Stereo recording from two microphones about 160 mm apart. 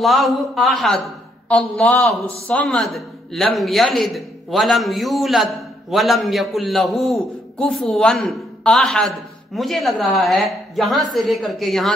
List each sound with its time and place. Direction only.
0.0 s a man's voice: centre (ahead or behind)